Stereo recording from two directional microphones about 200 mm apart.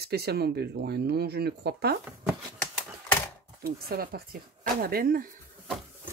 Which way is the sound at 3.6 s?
50° right (ahead or behind).